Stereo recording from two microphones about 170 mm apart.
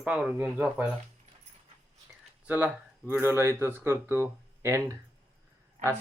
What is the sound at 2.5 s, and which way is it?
Speech, 10° right (ahead or behind).